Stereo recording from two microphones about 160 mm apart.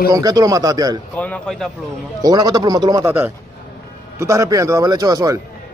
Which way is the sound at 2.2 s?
25° right (ahead or behind).